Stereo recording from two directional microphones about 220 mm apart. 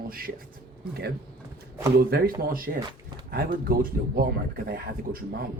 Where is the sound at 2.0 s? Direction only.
45° right (ahead or behind).